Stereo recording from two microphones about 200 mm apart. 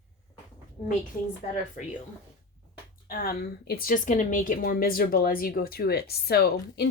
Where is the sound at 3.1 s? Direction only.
50° left (ahead or behind).